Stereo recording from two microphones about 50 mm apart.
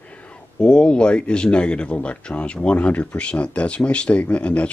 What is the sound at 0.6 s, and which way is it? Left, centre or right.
Speech, left.